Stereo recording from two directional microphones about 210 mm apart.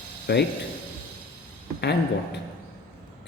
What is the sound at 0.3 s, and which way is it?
Speech, 55° left (ahead or behind).